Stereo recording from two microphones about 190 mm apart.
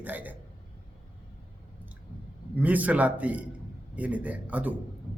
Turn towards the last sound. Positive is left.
turn(degrees=-10)  # may be behind; listen again after turning